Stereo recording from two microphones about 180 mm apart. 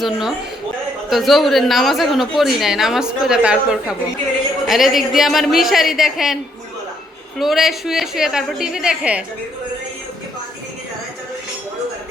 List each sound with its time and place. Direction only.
0.0 s a woman's voice: centre (ahead or behind)